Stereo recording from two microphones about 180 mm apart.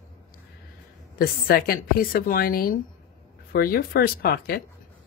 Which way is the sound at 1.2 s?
55° left (ahead or behind).